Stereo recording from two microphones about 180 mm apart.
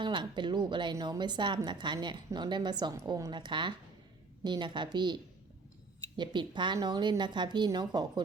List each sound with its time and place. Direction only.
0.0 s a woman's voice: 25° right (ahead or behind)